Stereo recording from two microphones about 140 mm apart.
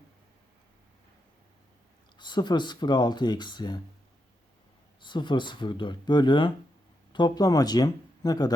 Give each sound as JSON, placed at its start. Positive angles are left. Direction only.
{"t": 2.1, "sound": "speech", "side_deg": 35}
{"t": 4.9, "sound": "speech", "side_deg": 35}